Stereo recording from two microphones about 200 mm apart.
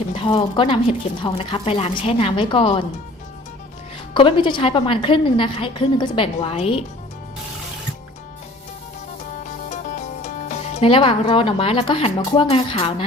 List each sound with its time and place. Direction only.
0.2 s a woman's voice: 25° left (ahead or behind)
4.1 s a woman's voice: 25° left (ahead or behind)
9.4 s speech: 40° left (ahead or behind)